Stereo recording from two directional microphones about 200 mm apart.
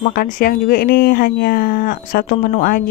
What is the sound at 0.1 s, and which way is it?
Speech, 45° left (ahead or behind).